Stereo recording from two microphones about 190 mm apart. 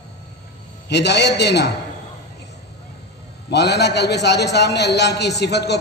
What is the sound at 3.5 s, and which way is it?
A man's voice, 60° left (ahead or behind).